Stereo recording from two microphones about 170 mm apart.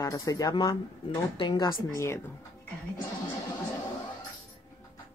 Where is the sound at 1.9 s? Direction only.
15° left (ahead or behind).